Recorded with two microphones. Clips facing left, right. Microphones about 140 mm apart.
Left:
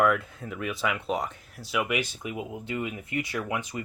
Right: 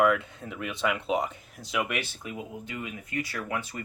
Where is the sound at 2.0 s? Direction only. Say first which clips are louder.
Left 4 dB; 20° left (ahead or behind).